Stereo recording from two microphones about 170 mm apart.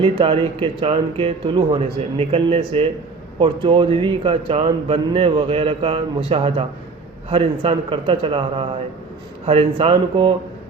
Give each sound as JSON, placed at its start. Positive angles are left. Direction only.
{"t": 0.0, "sound": "speech", "side_deg": -30}